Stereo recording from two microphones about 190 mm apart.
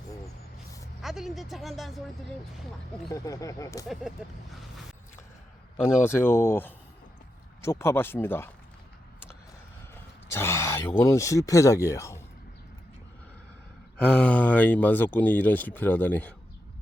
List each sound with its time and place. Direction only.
1.0 s speech: centre (ahead or behind)
3.1 s speech: 15° left (ahead or behind)
5.8 s speech: 10° left (ahead or behind)
9.9 s speech: 15° left (ahead or behind)
14.0 s speech: 5° left (ahead or behind)